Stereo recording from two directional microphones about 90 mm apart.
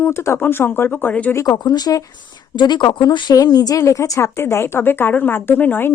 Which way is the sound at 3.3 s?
45° left (ahead or behind).